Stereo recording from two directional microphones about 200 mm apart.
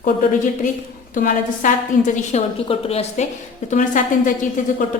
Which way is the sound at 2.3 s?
30° left (ahead or behind).